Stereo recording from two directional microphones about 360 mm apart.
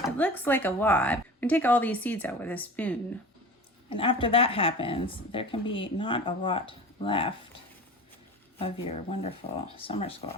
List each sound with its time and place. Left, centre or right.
0.2 s speech: centre
8.5 s speech: centre